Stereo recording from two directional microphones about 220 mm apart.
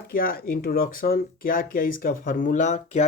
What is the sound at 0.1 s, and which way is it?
Speech, 40° left (ahead or behind).